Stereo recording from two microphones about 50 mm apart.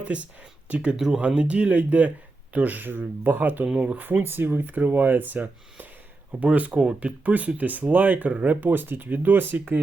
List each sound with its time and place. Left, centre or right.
0.0 s speech: right
1.4 s speech: right